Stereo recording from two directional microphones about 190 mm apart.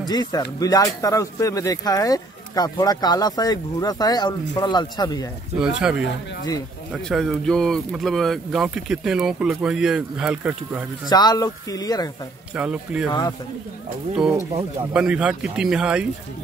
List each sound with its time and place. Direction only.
0.0 s speech: 20° left (ahead or behind)
5.6 s speech: 5° right (ahead or behind)
11.1 s speech: 20° left (ahead or behind)
12.5 s speech: 5° right (ahead or behind)
14.9 s speech: 5° right (ahead or behind)